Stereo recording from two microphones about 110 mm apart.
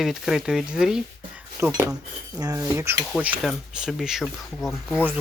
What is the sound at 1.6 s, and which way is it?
Speech, 25° right (ahead or behind).